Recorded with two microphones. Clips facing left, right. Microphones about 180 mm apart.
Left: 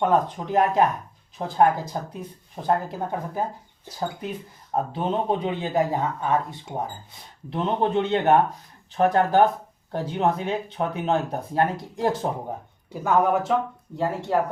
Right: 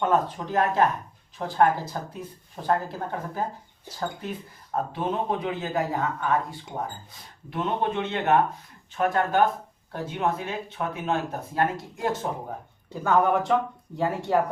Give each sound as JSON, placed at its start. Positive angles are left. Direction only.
{"t": 0.0, "sound": "speech", "side_deg": 15}
{"t": 4.7, "sound": "speech", "side_deg": 30}
{"t": 12.9, "sound": "speech", "side_deg": 10}